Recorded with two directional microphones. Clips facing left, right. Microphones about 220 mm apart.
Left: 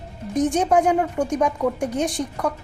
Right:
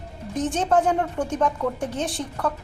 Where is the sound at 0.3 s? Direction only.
15° left (ahead or behind).